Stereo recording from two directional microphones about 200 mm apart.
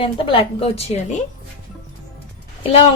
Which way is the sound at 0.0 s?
25° left (ahead or behind).